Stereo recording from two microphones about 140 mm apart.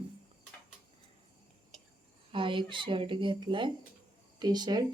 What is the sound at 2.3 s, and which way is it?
Speech, 35° right (ahead or behind).